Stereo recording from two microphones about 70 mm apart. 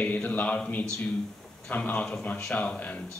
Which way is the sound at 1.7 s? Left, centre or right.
Left.